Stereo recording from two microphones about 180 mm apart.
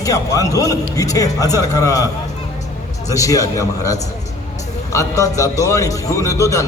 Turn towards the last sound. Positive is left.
turn(degrees=15)  # may be behind; listen again after turning